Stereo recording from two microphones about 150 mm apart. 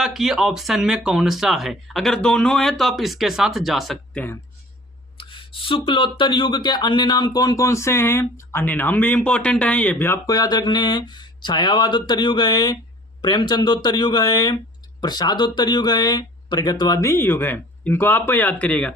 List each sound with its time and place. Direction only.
0.0 s speech: 5° right (ahead or behind)
5.1 s speech: 35° left (ahead or behind); by 18.9 s 10° left (ahead or behind)